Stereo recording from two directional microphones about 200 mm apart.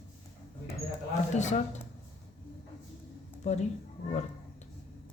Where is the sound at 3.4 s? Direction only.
35° left (ahead or behind).